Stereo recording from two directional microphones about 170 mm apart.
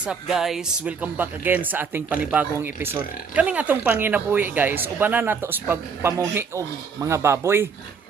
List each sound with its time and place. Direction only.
0.0 s speech: 5° right (ahead or behind)